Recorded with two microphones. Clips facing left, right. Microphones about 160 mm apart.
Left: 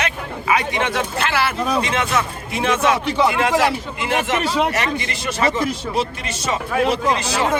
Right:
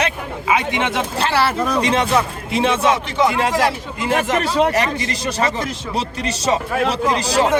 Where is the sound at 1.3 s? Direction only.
35° right (ahead or behind).